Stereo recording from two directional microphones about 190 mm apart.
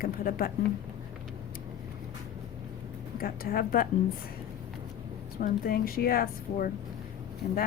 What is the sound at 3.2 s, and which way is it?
Speech, 50° left (ahead or behind).